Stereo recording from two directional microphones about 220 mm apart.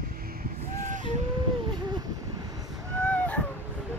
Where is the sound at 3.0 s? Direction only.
5° left (ahead or behind).